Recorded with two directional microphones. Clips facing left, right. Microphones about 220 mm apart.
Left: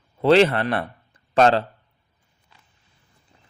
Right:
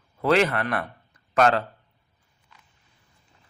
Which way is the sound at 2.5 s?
30° left (ahead or behind).